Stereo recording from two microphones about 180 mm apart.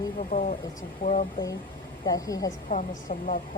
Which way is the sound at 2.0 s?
20° left (ahead or behind).